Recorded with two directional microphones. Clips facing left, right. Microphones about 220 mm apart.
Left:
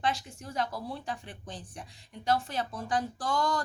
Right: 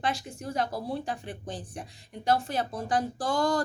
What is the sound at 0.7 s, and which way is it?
Speech, 45° right (ahead or behind).